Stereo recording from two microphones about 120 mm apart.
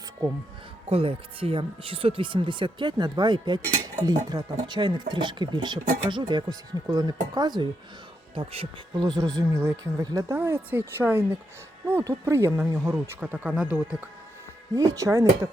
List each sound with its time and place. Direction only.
0.9 s speech: 55° right (ahead or behind); by 7.7 s 35° right (ahead or behind)
8.4 s speech: 45° right (ahead or behind)
8.9 s speech: 35° right (ahead or behind)
9.4 s speech: 20° right (ahead or behind)
10.3 s speech: 20° right (ahead or behind)
12.9 s speech: 15° right (ahead or behind)
14.8 s speech: 25° right (ahead or behind)